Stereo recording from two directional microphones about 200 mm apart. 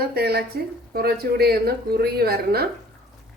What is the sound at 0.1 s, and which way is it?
Speech, 50° right (ahead or behind).